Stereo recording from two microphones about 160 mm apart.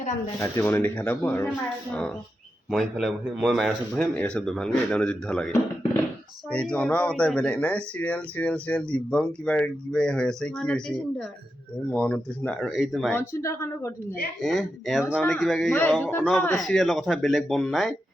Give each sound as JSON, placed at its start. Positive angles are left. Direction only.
{"t": 0.3, "sound": "speech", "side_deg": 15}
{"t": 2.6, "sound": "a man's voice", "side_deg": 0}
{"t": 6.5, "sound": "a man's voice", "side_deg": 5}
{"t": 13.1, "sound": "speech", "side_deg": 15}
{"t": 14.4, "sound": "a man's voice", "side_deg": 0}